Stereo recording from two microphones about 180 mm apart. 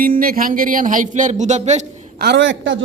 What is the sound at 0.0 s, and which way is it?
A man's voice, 50° right (ahead or behind).